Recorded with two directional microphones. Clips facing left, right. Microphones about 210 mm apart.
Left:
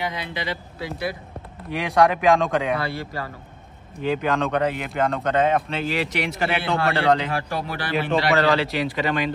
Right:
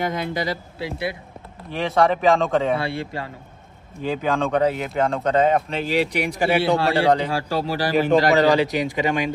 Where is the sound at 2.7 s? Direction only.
25° right (ahead or behind).